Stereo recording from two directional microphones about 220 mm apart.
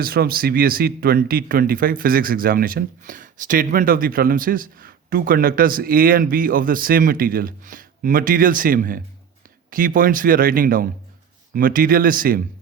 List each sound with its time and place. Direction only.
0.0 s speech: 45° right (ahead or behind)